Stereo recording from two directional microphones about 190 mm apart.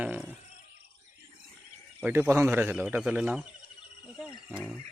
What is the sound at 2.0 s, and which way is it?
Speech, 10° right (ahead or behind).